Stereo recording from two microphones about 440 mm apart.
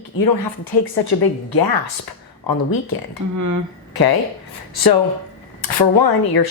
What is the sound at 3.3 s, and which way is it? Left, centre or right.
Speech, right.